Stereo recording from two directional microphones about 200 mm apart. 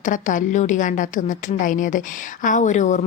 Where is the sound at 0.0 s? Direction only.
40° left (ahead or behind).